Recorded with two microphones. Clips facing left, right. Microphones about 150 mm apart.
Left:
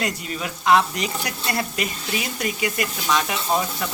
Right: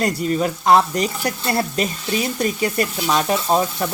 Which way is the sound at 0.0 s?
40° right (ahead or behind).